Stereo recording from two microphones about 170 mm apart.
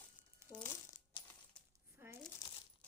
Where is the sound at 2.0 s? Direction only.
15° right (ahead or behind).